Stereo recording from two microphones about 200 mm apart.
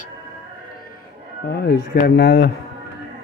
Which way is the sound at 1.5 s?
50° left (ahead or behind).